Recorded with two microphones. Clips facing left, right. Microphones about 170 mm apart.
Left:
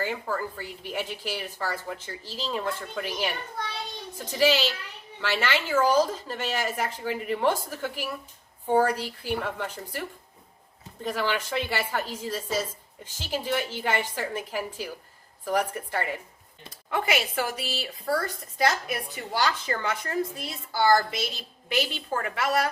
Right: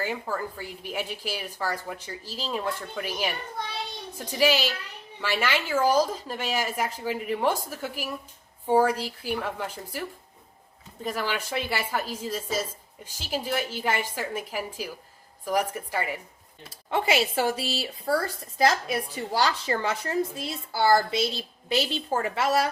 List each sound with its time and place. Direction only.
0.0 s speech: 10° right (ahead or behind)
11.0 s speech: 10° right (ahead or behind)
16.9 s a woman's voice: 30° right (ahead or behind)